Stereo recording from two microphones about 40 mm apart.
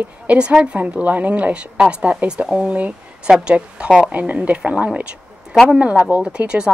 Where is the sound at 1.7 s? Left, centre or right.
Right.